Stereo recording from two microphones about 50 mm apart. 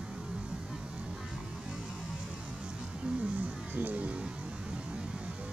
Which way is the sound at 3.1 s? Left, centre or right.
Right.